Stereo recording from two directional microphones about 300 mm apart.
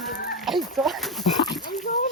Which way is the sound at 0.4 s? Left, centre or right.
Centre.